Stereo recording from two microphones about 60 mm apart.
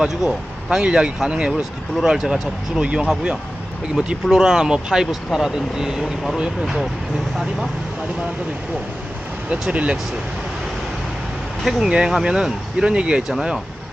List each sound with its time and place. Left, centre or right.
0.1 s speech: centre
4.3 s speech: centre
9.5 s speech: centre
11.6 s speech: centre
11.9 s speech: centre